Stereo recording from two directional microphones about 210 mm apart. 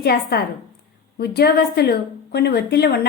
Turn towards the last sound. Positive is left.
turn(degrees=50)  # may be behind; listen again after turning